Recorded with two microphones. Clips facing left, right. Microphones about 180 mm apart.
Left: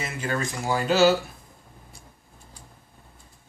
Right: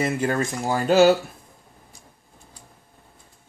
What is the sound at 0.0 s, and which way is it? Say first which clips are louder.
Speech: right 6 dB; 55° right (ahead or behind).